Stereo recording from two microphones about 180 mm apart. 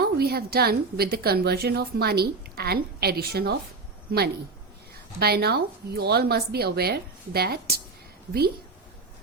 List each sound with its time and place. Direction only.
0.0 s a woman's voice: 60° right (ahead or behind)